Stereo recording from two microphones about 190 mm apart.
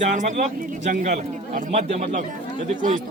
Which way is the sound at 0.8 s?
40° right (ahead or behind).